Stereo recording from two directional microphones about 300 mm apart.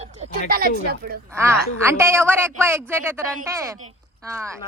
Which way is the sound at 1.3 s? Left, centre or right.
Centre.